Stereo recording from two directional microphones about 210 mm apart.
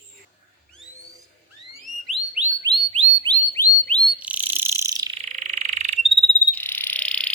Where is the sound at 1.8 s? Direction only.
Centre (ahead or behind).